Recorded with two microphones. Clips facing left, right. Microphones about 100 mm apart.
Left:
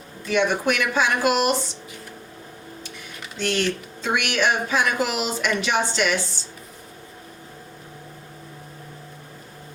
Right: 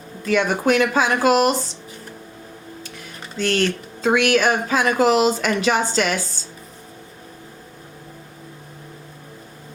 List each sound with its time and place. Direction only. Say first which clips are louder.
0.3 s speech: right 3 dB; 45° right (ahead or behind)
2.8 s tick: right 2 dB; 40° right (ahead or behind)
4.0 s speech: right 6 dB; 45° right (ahead or behind)